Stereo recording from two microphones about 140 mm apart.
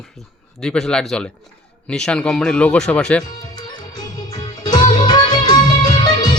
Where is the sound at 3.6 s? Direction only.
30° left (ahead or behind).